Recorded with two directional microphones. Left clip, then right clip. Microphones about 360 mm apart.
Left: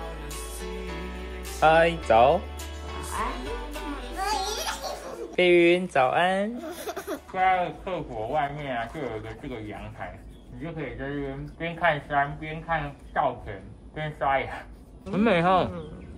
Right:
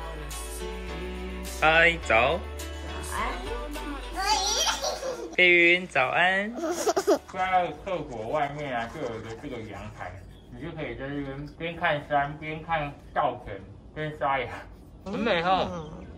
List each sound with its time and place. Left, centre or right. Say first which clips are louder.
1.6 s speech: left 1 dB; centre
2.9 s music: left 1 dB; centre
5.3 s speech: right 1 dB; centre
11.8 s speech: left 2 dB; centre
14.3 s speech: left 3 dB; centre
15.0 s a man's voice: left 2 dB; centre